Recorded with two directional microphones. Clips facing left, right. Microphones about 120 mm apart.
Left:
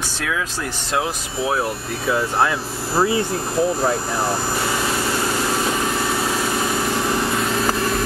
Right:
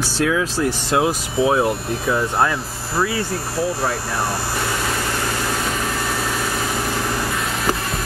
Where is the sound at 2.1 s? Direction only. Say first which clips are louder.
Even; 5° left (ahead or behind).